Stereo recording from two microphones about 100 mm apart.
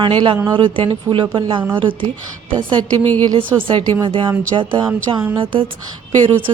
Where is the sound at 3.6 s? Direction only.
55° right (ahead or behind).